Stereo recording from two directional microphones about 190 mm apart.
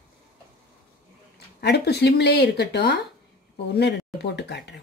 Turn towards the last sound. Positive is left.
turn(degrees=65)  # may be behind; listen again after turning